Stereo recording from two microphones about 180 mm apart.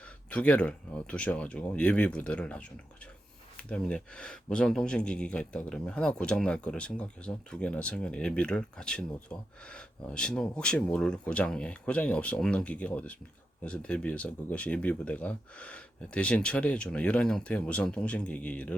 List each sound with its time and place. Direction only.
0.3 s speech: 5° left (ahead or behind)